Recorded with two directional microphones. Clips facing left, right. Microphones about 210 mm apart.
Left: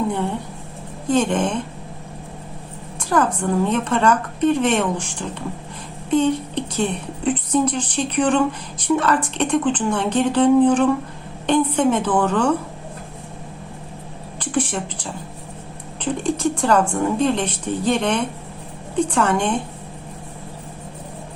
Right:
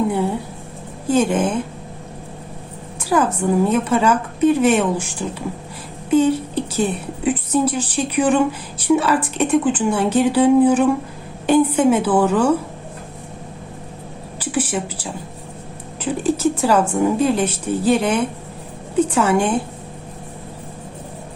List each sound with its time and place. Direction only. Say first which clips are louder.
1.0 s speech: right 2 dB; 5° right (ahead or behind)
3.0 s a woman's voice: right 2 dB; 5° right (ahead or behind)
14.3 s a sound: right 1 dB; 5° right (ahead or behind)
16.0 s speech: right 2 dB; 5° right (ahead or behind)